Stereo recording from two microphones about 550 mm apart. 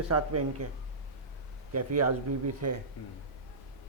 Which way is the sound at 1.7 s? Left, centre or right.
Right.